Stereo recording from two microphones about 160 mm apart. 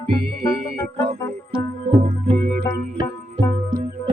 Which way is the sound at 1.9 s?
40° right (ahead or behind).